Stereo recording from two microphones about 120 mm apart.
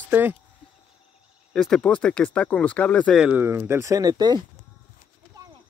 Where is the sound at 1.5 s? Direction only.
5° left (ahead or behind).